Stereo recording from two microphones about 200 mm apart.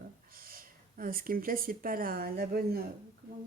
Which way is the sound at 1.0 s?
45° right (ahead or behind).